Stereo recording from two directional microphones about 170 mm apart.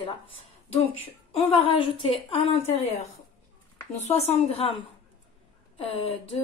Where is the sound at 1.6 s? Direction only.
30° left (ahead or behind).